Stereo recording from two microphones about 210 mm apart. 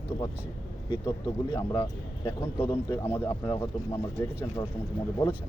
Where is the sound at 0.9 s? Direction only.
15° left (ahead or behind).